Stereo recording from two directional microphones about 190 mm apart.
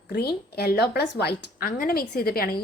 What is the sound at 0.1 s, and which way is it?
A woman's voice, 55° left (ahead or behind).